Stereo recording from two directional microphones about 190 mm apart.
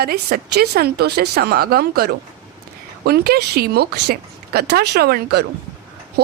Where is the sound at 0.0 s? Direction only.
55° right (ahead or behind).